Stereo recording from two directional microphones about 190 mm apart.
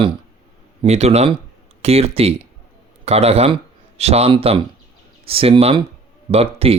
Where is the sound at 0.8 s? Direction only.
35° right (ahead or behind).